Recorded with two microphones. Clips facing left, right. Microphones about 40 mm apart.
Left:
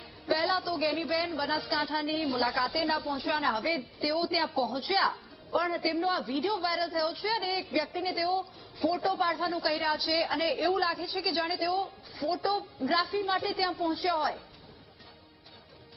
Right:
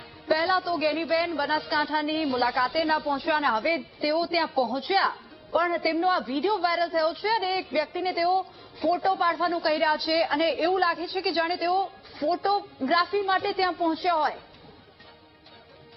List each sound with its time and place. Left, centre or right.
0.3 s a woman's voice: centre
4.8 s music: centre
5.5 s a woman's voice: centre
8.8 s a woman's voice: centre
10.5 s a woman's voice: centre